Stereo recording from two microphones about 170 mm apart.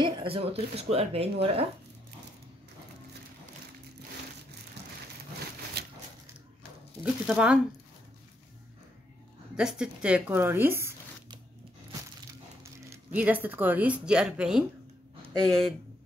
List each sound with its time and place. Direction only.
0.0 s speech: 30° right (ahead or behind)
5.8 s a sound: 70° right (ahead or behind)
7.0 s speech: 5° right (ahead or behind)
9.6 s speech: 5° right (ahead or behind)
12.9 s speech: 10° right (ahead or behind)